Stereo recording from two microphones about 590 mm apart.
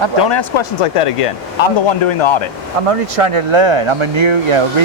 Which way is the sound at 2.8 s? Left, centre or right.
Right.